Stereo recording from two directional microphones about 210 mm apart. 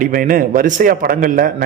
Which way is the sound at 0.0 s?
40° right (ahead or behind).